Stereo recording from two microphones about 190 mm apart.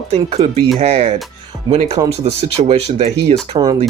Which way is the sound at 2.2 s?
30° right (ahead or behind).